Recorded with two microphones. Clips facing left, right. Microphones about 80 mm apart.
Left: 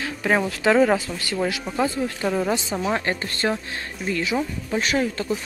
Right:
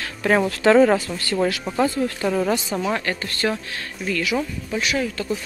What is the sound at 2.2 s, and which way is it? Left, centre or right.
Speech, centre.